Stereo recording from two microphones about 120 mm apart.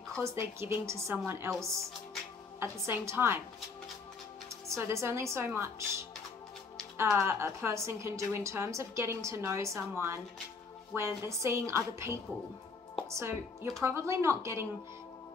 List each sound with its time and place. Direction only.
0.2 s a woman's voice: 25° right (ahead or behind)
2.6 s a woman's voice: 20° right (ahead or behind)
4.6 s a woman's voice: 25° right (ahead or behind)